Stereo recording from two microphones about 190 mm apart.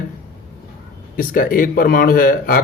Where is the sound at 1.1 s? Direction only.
50° left (ahead or behind).